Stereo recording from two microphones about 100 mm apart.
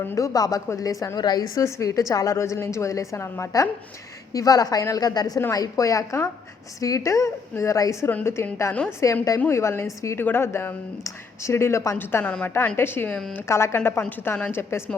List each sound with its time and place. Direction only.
0.0 s speech: 25° left (ahead or behind)
0.3 s a woman's voice: 35° left (ahead or behind)
12.2 s a woman's voice: 10° left (ahead or behind)
12.6 s speech: 20° left (ahead or behind)